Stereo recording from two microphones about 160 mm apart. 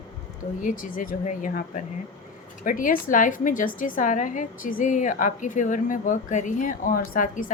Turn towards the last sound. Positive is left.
turn(degrees=60)  # may be behind; listen again after turning